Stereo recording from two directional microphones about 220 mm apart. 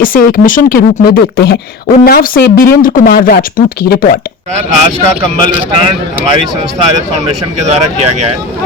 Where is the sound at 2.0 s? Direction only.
40° left (ahead or behind).